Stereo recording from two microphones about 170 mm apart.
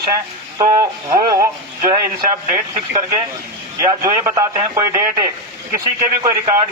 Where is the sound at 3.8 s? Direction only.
20° right (ahead or behind).